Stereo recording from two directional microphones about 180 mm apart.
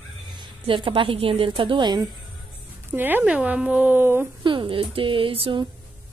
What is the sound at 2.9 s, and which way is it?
A woman's voice, 10° right (ahead or behind).